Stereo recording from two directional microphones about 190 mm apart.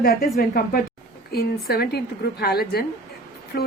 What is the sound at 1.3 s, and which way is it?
A woman's voice, 55° left (ahead or behind).